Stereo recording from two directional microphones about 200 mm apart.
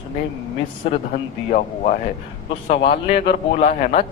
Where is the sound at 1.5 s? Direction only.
40° left (ahead or behind).